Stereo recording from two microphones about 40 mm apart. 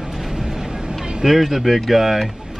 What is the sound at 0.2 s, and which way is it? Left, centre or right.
Vehicle, centre.